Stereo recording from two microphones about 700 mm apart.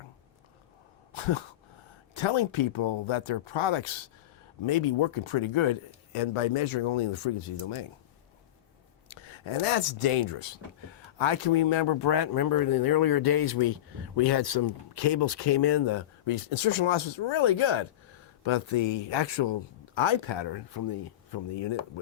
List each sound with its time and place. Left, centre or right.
1.1 s a sound: left
2.1 s speech: left
9.0 s speech: left